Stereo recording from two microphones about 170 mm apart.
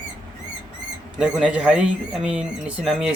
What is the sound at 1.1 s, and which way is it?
A man's voice, 5° right (ahead or behind).